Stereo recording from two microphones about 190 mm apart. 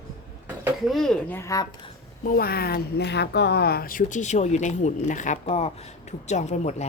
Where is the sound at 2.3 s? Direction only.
55° left (ahead or behind).